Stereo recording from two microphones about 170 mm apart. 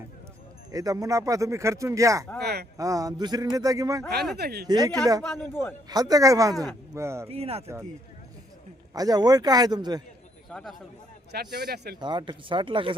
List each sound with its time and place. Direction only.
0.7 s speech: 20° right (ahead or behind)
2.4 s speech: 70° right (ahead or behind)
2.7 s speech: 20° right (ahead or behind)
4.4 s speech: 70° right (ahead or behind)
4.6 s speech: 20° right (ahead or behind)
5.2 s speech: 5° left (ahead or behind)
5.9 s speech: 20° right (ahead or behind)
7.3 s speech: 35° right (ahead or behind)
8.9 s speech: 20° right (ahead or behind)
10.5 s speech: centre (ahead or behind)
11.3 s speech: 65° right (ahead or behind)
11.9 s speech: 25° right (ahead or behind)